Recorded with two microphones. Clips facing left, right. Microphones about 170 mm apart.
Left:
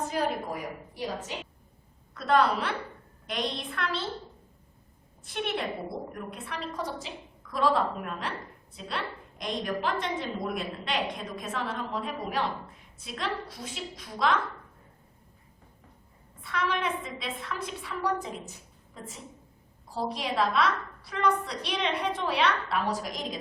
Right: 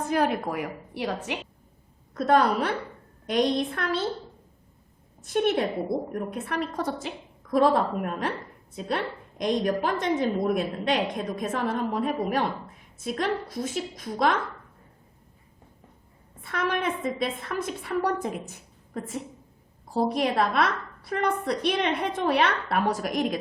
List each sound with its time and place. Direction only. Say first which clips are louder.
0.1 s a woman's voice: right 5 dB; 65° right (ahead or behind)
2.1 s a woman's voice: right 3 dB; 45° right (ahead or behind)
5.2 s a woman's voice: right 8 dB; 45° right (ahead or behind)
16.4 s a woman's voice: right 3 dB; 50° right (ahead or behind)